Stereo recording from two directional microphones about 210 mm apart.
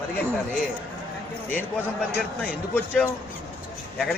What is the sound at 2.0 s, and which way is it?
Speech, 5° left (ahead or behind).